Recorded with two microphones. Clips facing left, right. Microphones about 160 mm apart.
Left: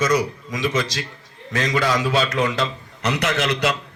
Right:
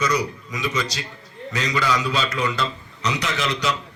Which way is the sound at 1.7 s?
60° left (ahead or behind).